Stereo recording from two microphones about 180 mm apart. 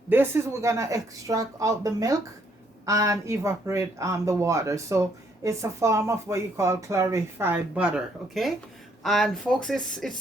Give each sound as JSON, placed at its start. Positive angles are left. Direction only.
{"t": 0.1, "sound": "speech", "side_deg": -15}